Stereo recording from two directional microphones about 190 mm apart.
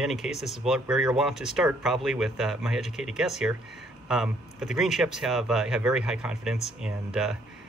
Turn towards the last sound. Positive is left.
turn(degrees=-5)  # may be behind; listen again after turning